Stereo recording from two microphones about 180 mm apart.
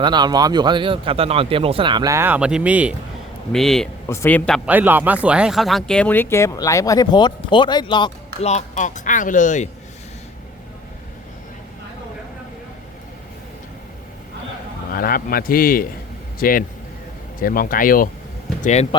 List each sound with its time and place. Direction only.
0.0 s speech: 25° right (ahead or behind); by 4.6 s 5° left (ahead or behind)
4.6 s speech: 10° right (ahead or behind); by 8.4 s 25° left (ahead or behind)
8.4 s speech: 40° left (ahead or behind)
14.9 s speech: 55° left (ahead or behind)
18.6 s speech: 40° left (ahead or behind)